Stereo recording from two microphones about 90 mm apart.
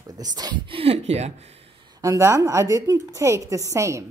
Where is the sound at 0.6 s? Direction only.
90° right.